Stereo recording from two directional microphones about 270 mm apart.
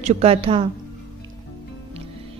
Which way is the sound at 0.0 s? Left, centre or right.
Right.